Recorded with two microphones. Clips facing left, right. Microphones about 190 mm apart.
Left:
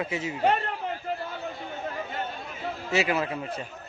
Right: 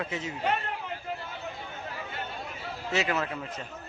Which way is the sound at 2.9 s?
10° left (ahead or behind).